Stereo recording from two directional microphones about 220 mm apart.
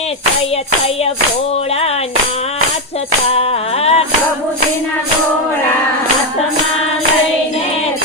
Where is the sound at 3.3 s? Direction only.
25° left (ahead or behind).